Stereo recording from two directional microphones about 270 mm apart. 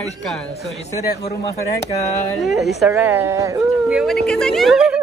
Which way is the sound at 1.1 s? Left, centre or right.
Left.